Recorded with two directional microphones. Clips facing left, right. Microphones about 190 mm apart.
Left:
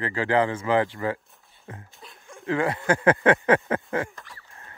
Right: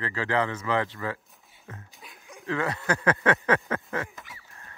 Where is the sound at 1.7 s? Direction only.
30° left (ahead or behind).